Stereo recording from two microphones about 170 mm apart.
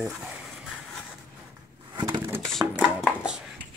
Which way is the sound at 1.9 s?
25° right (ahead or behind).